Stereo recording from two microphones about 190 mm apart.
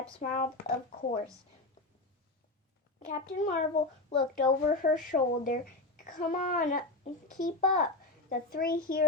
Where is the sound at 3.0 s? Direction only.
40° left (ahead or behind).